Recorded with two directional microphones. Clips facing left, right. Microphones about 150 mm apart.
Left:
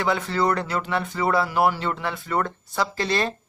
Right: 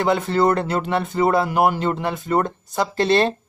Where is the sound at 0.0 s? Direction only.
25° right (ahead or behind).